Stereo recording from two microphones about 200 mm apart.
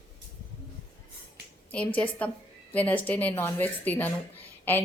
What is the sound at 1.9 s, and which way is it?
A woman's voice, 5° left (ahead or behind).